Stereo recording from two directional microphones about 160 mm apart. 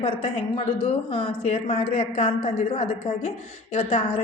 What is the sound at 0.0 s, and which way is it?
A woman's voice, 40° left (ahead or behind).